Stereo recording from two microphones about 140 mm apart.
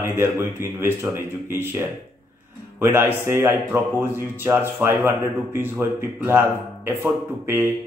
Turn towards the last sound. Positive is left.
turn(degrees=-15)  # may be behind; listen again after turning